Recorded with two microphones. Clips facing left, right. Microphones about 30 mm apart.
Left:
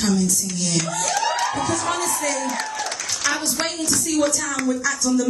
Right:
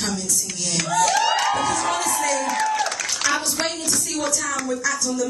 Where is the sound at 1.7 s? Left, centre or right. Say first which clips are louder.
Right 1 dB; centre.